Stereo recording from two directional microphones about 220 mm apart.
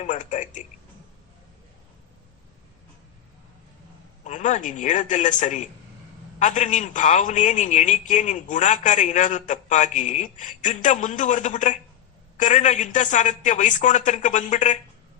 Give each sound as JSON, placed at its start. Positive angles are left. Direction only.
{"t": 0.0, "sound": "a man's voice", "side_deg": 35}
{"t": 4.2, "sound": "a man's voice", "side_deg": 35}